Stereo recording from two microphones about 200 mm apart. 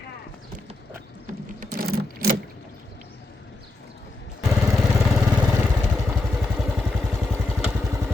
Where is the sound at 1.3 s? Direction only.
45° right (ahead or behind).